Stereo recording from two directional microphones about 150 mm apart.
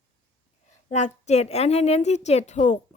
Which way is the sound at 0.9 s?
50° left (ahead or behind).